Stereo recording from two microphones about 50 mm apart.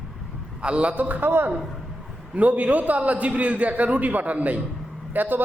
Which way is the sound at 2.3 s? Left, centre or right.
Right.